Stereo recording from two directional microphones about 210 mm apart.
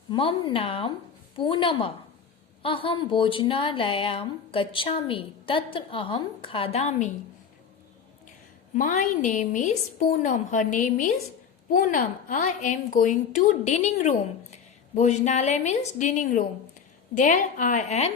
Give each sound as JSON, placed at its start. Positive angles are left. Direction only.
{"t": 0.1, "sound": "speech", "side_deg": 25}
{"t": 8.7, "sound": "a woman's voice", "side_deg": 35}